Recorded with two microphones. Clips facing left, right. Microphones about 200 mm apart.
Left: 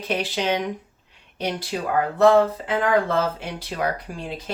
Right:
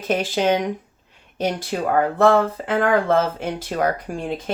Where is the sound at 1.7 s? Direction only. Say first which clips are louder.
Right 4 dB; 50° right (ahead or behind).